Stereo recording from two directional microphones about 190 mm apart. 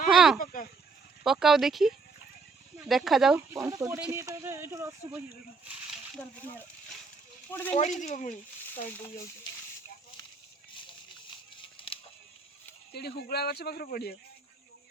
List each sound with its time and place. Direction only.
0.1 s a sound: 5° right (ahead or behind)
0.3 s speech: 45° left (ahead or behind)
1.2 s speech: centre (ahead or behind)
3.5 s speech: 15° right (ahead or behind)
5.6 s a sound: 5° right (ahead or behind)
6.4 s speech: 10° left (ahead or behind)
7.8 s speech: 40° left (ahead or behind)
10.8 s a sound: 25° left (ahead or behind)
11.6 s music: 25° left (ahead or behind)
12.9 s speech: 55° left (ahead or behind)